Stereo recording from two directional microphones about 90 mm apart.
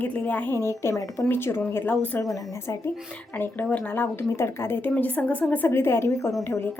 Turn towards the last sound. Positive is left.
turn(degrees=35)  # may be behind; listen again after turning